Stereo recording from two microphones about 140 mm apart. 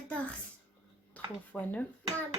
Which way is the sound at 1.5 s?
10° left (ahead or behind).